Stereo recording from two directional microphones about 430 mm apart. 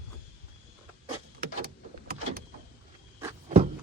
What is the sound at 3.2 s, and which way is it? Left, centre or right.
Cupboard open or close, centre.